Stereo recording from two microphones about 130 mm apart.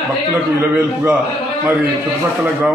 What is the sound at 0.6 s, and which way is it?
Speech, 15° right (ahead or behind).